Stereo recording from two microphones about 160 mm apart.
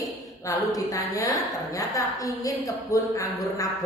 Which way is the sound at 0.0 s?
20° left (ahead or behind).